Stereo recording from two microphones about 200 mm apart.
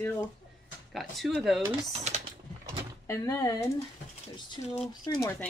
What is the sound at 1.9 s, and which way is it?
Speech, 35° right (ahead or behind).